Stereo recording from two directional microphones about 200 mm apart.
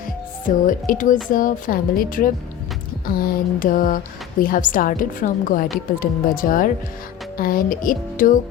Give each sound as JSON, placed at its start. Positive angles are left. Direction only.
{"t": 0.4, "sound": "a woman's voice", "side_deg": 45}